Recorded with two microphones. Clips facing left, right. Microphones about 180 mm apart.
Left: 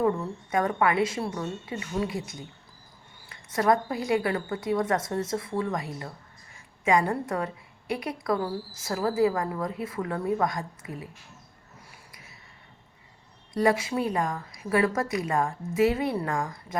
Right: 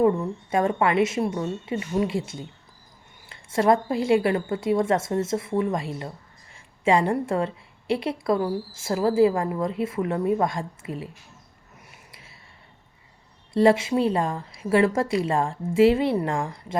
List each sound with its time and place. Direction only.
0.5 s a woman's voice: 25° right (ahead or behind)
11.9 s a sound: 25° right (ahead or behind)
13.5 s a woman's voice: 30° right (ahead or behind)